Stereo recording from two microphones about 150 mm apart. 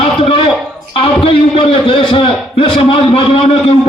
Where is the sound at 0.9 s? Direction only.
35° left (ahead or behind).